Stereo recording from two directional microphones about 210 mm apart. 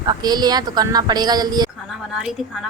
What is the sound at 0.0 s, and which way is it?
Speech, 20° right (ahead or behind).